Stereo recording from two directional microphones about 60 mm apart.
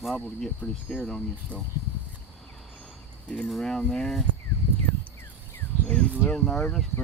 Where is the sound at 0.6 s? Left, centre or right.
Left.